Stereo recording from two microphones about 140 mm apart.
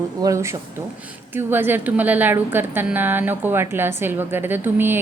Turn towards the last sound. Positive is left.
turn(degrees=-15)  # may be behind; listen again after turning